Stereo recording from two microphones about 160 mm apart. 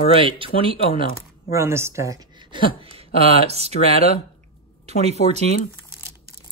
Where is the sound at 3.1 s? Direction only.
40° right (ahead or behind).